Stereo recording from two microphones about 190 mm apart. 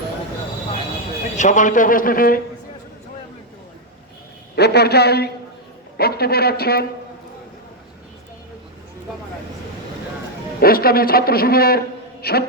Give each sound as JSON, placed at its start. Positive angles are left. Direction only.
{"t": 1.4, "sound": "a man's voice", "side_deg": 40}
{"t": 4.5, "sound": "speech", "side_deg": 60}
{"t": 10.6, "sound": "a man's voice", "side_deg": 50}